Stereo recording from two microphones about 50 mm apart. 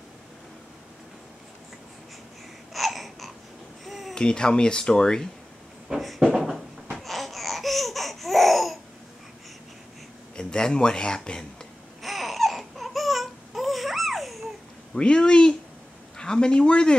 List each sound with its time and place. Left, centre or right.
2.7 s a sound: centre
4.1 s speech: centre
5.9 s a sound: centre
7.0 s laughter: centre
10.3 s a man's voice: centre
12.0 s baby cry: centre
15.0 s speech: centre